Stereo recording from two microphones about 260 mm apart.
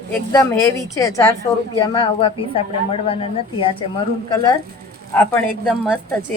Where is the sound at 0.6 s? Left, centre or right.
Centre.